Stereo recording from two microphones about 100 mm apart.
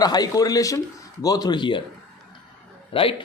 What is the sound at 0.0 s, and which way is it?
Speech, 40° left (ahead or behind).